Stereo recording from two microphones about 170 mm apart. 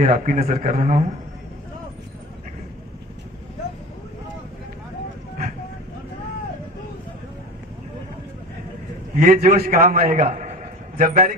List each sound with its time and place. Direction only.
0.0 s a man's voice: 50° right (ahead or behind)
9.1 s a man's voice: 55° right (ahead or behind)